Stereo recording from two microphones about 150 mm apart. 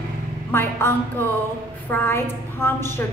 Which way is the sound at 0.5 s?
15° left (ahead or behind).